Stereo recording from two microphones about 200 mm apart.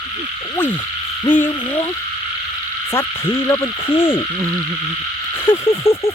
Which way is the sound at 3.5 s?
15° left (ahead or behind).